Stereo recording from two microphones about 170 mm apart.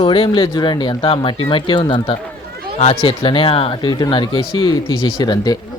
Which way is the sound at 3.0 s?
30° left (ahead or behind).